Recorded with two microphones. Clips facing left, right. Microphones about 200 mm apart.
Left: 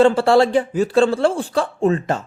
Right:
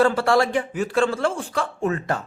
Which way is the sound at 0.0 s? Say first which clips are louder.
Left 5 dB; 30° left (ahead or behind).